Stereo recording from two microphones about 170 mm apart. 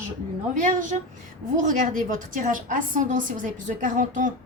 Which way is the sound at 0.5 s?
50° right (ahead or behind).